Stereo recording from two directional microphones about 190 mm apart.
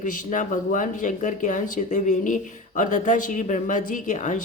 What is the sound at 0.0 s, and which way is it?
Speech, 40° left (ahead or behind).